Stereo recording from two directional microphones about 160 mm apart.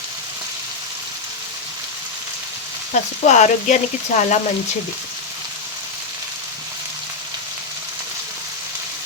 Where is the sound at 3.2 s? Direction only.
50° left (ahead or behind).